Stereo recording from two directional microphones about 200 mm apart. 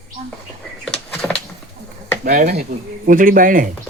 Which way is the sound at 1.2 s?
15° left (ahead or behind).